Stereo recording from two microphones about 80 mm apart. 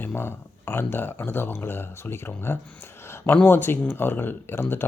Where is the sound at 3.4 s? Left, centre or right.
Left.